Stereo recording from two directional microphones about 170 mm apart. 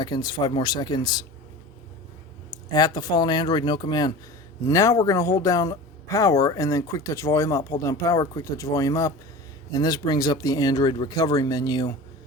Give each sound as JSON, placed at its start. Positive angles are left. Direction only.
{"t": 0.0, "sound": "speech", "side_deg": 25}
{"t": 2.7, "sound": "speech", "side_deg": 25}